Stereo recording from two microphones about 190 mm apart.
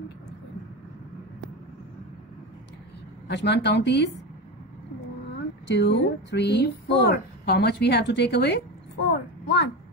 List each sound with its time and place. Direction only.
3.3 s speech: 65° left (ahead or behind)
5.7 s speech: 65° left (ahead or behind)
9.1 s a sound: 60° left (ahead or behind)